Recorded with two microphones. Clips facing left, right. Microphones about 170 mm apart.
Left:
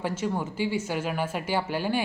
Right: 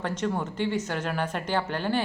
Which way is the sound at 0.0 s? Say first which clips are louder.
Even; 5° left (ahead or behind).